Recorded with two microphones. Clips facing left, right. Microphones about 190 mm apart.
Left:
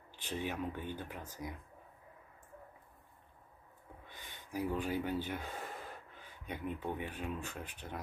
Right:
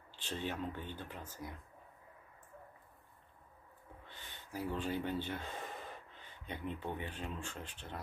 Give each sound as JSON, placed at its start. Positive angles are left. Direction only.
{"t": 0.1, "sound": "speech", "side_deg": 15}
{"t": 4.1, "sound": "speech", "side_deg": 15}